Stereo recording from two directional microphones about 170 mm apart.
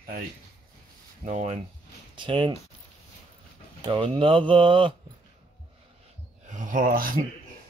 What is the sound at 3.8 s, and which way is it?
Speech, 30° right (ahead or behind).